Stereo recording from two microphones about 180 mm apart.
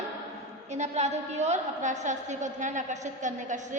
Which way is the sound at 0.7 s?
40° right (ahead or behind).